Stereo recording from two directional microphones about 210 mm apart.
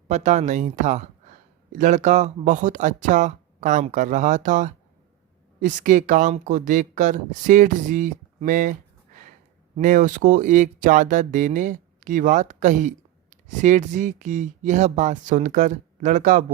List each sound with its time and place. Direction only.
0.1 s speech: 35° right (ahead or behind)